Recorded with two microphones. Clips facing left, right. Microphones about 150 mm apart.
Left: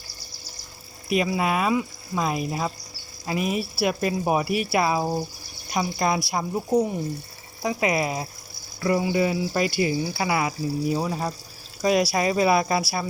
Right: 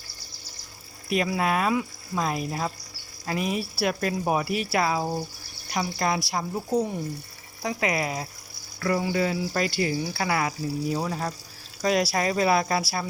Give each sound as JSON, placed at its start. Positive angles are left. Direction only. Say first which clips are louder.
{"t": 1.1, "sound": "speech", "louder": "left 2 dB", "side_deg": 5}
{"t": 9.0, "sound": "speech", "louder": "left 3 dB", "side_deg": 15}